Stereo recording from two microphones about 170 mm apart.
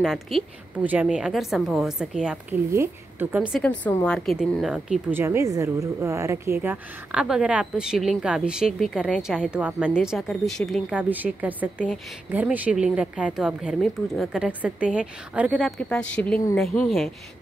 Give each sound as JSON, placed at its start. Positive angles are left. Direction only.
{"t": 0.0, "sound": "a woman's voice", "side_deg": 0}
{"t": 3.6, "sound": "a woman's voice", "side_deg": 10}
{"t": 5.2, "sound": "a woman's voice", "side_deg": -15}
{"t": 15.8, "sound": "a woman's voice", "side_deg": 5}